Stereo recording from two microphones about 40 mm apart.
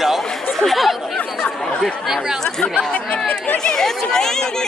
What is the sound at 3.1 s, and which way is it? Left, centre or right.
Speech, left.